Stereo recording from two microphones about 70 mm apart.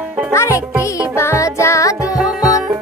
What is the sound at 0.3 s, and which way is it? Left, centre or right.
Music, left.